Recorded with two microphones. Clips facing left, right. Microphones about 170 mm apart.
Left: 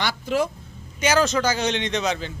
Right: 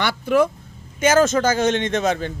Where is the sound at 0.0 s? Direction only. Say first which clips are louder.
Right 5 dB; 55° right (ahead or behind).